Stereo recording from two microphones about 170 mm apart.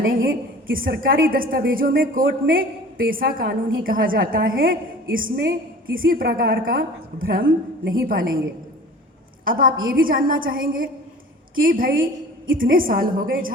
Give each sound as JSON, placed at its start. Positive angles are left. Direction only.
{"t": 0.2, "sound": "a woman's voice", "side_deg": -60}
{"t": 9.4, "sound": "a woman's voice", "side_deg": -55}